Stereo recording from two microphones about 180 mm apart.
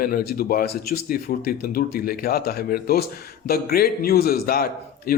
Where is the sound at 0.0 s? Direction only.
55° left (ahead or behind).